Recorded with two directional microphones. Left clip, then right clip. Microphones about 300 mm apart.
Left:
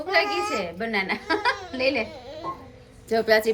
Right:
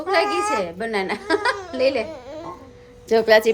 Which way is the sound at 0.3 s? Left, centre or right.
Right.